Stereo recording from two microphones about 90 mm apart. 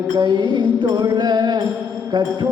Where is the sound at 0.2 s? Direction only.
55° right (ahead or behind).